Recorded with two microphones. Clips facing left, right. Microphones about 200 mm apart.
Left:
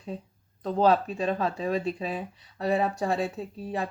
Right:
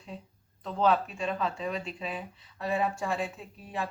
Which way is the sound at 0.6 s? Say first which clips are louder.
Left 4 dB; 35° left (ahead or behind).